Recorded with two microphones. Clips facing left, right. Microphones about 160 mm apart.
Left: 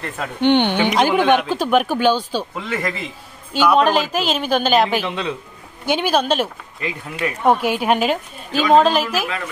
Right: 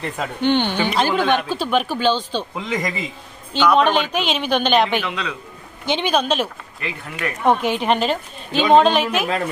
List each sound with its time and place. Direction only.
0.7 s speech: 15° left (ahead or behind)
2.5 s speech: 15° right (ahead or behind)
3.5 s a woman's voice: 5° left (ahead or behind)
5.0 s speech: 25° left (ahead or behind)
5.9 s a woman's voice: 5° left (ahead or behind)